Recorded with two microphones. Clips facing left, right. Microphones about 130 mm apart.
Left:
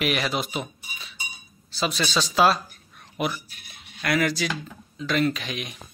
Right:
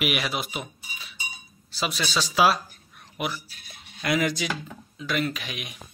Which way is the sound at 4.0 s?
15° right (ahead or behind).